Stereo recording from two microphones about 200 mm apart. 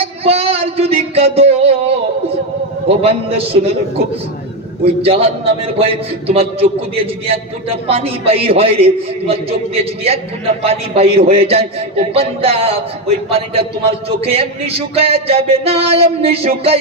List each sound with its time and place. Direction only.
0.0 s a sound: 30° right (ahead or behind)
2.8 s a man's voice: 30° right (ahead or behind)
5.2 s a man's voice: 30° right (ahead or behind)